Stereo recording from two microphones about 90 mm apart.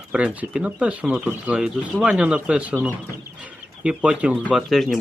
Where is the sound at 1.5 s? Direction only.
10° right (ahead or behind).